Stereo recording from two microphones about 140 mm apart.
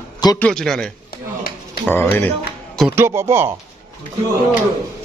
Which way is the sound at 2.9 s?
20° right (ahead or behind).